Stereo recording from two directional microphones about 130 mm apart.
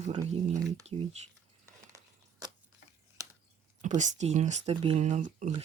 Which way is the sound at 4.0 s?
65° right (ahead or behind).